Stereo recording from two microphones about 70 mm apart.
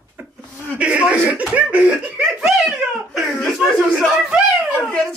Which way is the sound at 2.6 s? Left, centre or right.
Centre.